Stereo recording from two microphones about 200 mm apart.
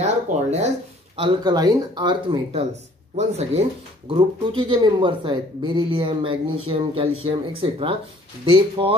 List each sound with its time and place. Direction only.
0.0 s speech: 35° right (ahead or behind)